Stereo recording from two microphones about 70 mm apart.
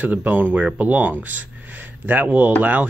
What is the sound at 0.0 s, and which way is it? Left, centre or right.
Speech, right.